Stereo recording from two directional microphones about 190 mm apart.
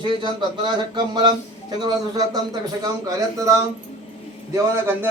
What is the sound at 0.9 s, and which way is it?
A man's voice, 25° right (ahead or behind).